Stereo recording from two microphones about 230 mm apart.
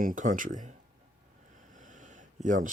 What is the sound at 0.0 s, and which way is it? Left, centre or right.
Speech, right.